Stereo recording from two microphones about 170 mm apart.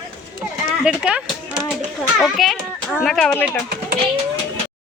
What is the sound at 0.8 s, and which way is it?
A child's voice, 5° right (ahead or behind).